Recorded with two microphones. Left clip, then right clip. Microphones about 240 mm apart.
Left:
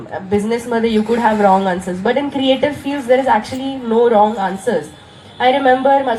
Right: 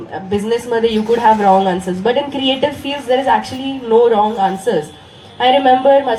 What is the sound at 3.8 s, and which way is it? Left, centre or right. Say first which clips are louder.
A woman's voice: right 1 dB; right.